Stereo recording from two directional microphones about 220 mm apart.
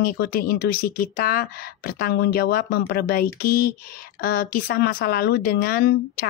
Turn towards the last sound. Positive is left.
turn(degrees=45)  # may be behind; listen again after turning